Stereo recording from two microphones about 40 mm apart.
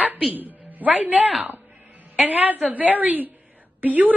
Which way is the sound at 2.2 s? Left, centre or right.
Right.